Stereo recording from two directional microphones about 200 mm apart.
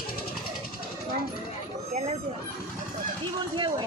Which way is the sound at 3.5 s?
25° right (ahead or behind).